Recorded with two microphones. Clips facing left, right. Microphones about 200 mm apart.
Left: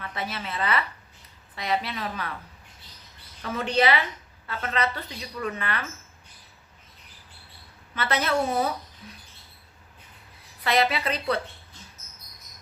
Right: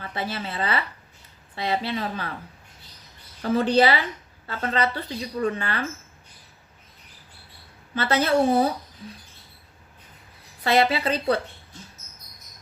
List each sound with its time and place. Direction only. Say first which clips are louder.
0.0 s a woman's voice: right 3 dB; 30° right (ahead or behind)
3.4 s a woman's voice: right 5 dB; 30° right (ahead or behind)
7.9 s a woman's voice: right 5 dB; 30° right (ahead or behind)
10.6 s a woman's voice: right 3 dB; 30° right (ahead or behind)